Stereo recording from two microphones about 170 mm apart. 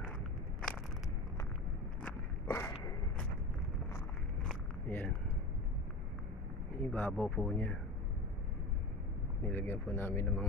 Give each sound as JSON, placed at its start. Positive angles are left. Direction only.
{"t": 2.0, "sound": "biting", "side_deg": 10}
{"t": 2.7, "sound": "a sound", "side_deg": 25}
{"t": 4.5, "sound": "biting", "side_deg": 10}
{"t": 6.8, "sound": "speech", "side_deg": 10}
{"t": 9.4, "sound": "speech", "side_deg": 10}